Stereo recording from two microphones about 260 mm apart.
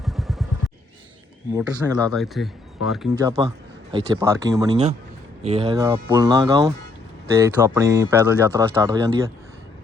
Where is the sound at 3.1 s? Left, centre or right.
Centre.